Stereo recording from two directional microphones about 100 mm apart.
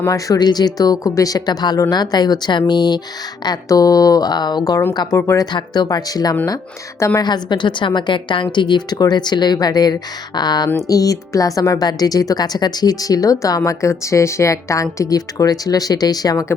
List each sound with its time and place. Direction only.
0.1 s a woman's voice: 40° left (ahead or behind)
5.1 s speech: 30° left (ahead or behind)
5.5 s a woman's voice: 45° left (ahead or behind)